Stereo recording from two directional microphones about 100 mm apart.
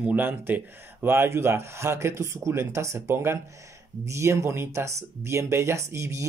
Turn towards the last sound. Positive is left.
turn(degrees=-30)  # may be behind; listen again after turning